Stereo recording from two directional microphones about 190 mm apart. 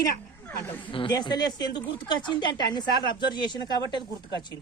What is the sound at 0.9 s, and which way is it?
A woman's voice, 25° left (ahead or behind).